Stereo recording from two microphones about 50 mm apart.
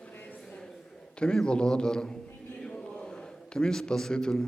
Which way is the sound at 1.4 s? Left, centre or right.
Centre.